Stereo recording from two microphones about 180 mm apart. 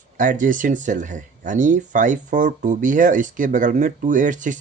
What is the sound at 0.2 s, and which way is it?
Speech, 45° right (ahead or behind).